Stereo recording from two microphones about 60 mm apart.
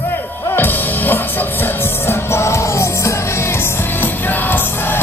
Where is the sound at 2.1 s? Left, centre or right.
Left.